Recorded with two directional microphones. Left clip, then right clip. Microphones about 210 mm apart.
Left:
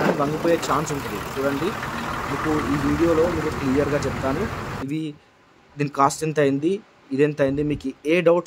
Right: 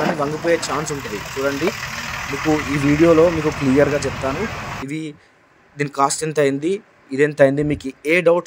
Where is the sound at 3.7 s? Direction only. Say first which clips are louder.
Right 6 dB; 25° right (ahead or behind).